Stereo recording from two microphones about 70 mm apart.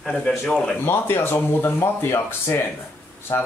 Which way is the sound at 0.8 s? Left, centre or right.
Left.